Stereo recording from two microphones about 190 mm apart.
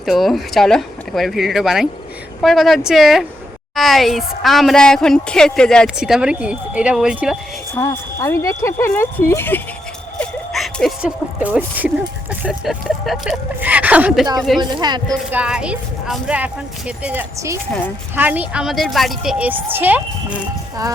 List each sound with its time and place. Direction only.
0.0 s a woman's voice: centre (ahead or behind)
7.8 s speech: 15° left (ahead or behind)
10.2 s a sound: centre (ahead or behind)
11.3 s a woman's voice: 10° right (ahead or behind)
14.6 s speech: 20° right (ahead or behind)
15.3 s a woman's voice: 5° right (ahead or behind)